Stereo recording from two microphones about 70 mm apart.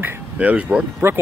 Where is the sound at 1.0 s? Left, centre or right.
Right.